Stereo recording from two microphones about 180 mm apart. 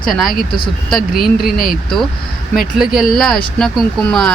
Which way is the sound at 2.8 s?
Centre (ahead or behind).